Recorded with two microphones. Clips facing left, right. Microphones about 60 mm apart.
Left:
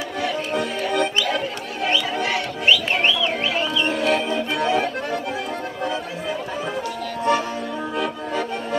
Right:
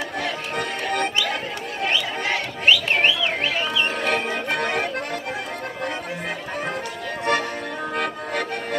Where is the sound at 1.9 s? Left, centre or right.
Right.